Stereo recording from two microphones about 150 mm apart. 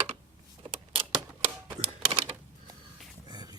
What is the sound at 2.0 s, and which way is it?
Typewriter, 35° right (ahead or behind).